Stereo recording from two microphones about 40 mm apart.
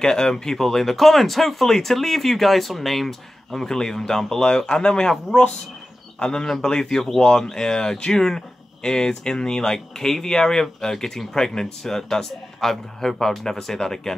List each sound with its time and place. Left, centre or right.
0.0 s speech: centre
3.6 s speech: centre